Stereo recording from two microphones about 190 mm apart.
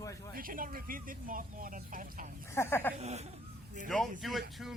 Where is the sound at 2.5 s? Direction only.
15° left (ahead or behind).